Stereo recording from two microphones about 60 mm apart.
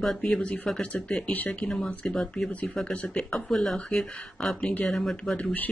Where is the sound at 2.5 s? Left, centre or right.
Left.